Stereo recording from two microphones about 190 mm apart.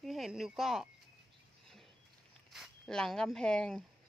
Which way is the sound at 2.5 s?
Centre (ahead or behind).